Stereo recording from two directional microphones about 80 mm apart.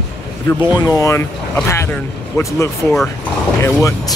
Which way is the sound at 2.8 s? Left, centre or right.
Left.